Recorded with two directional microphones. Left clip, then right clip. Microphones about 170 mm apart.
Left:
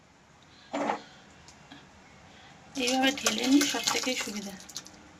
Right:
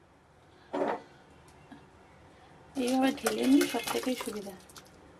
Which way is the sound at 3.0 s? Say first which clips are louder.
Left 2 dB; 35° right (ahead or behind).